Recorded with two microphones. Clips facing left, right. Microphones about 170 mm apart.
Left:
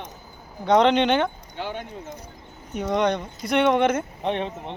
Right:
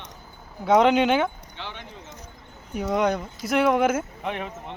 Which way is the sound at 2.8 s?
5° right (ahead or behind).